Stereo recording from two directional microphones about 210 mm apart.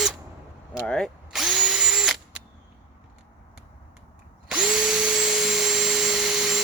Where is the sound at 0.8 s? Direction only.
5° left (ahead or behind).